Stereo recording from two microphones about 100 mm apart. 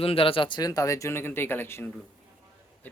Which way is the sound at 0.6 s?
35° left (ahead or behind).